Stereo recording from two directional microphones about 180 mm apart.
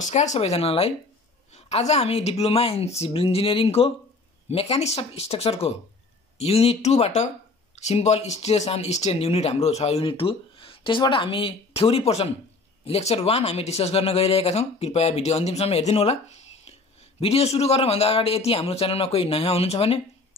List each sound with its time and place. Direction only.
0.0 s speech: 40° left (ahead or behind)
17.2 s speech: 35° left (ahead or behind)